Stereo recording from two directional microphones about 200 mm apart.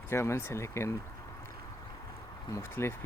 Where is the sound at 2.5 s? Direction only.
15° left (ahead or behind).